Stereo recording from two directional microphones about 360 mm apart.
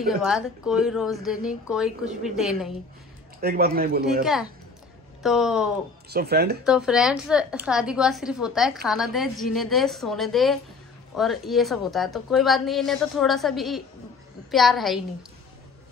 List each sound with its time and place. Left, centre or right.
0.0 s a woman's voice: centre
3.3 s a man's voice: right
4.2 s a woman's voice: centre
6.0 s a man's voice: right
6.6 s a woman's voice: centre